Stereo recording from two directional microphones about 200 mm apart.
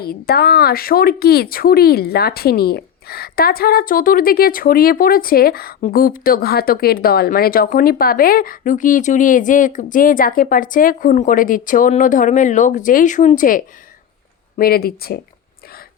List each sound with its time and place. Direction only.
0.0 s speech: 50° left (ahead or behind)